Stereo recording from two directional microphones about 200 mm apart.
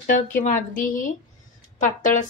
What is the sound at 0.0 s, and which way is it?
A woman's voice, 45° left (ahead or behind).